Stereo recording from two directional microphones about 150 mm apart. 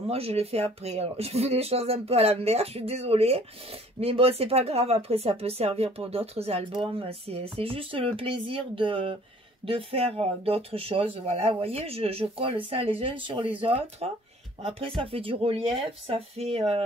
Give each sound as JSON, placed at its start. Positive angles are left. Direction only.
{"t": 0.1, "sound": "speech", "side_deg": -40}